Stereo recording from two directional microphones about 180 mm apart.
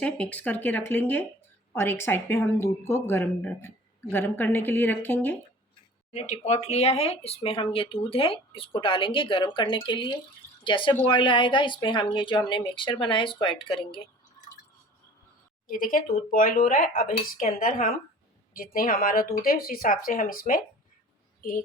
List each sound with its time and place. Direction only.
0.0 s speech: 10° left (ahead or behind)
6.1 s speech: 40° left (ahead or behind)
15.6 s speech: 50° left (ahead or behind)